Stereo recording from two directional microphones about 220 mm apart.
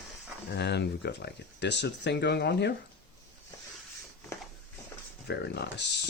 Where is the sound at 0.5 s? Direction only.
50° left (ahead or behind).